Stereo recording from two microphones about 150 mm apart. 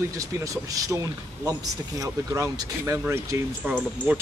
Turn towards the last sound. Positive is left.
turn(degrees=-10)  # may be behind; listen again after turning